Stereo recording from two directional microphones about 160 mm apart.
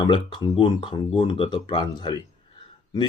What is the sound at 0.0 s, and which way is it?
Speech, 30° left (ahead or behind).